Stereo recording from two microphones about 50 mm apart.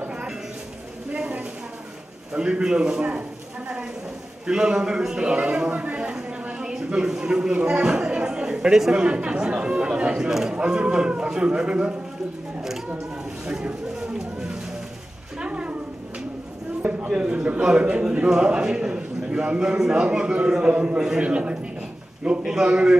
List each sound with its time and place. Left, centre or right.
1.1 s a sound: right
2.3 s a man's voice: centre
5.8 s a sound: right
7.1 s speech: centre
13.5 s a man's voice: centre
17.1 s a man's voice: right